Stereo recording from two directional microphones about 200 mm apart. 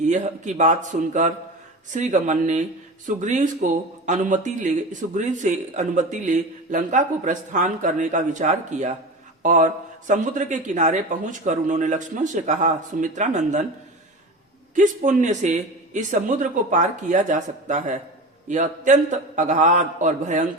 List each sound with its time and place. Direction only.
0.0 s speech: 35° right (ahead or behind)
14.8 s speech: 40° right (ahead or behind)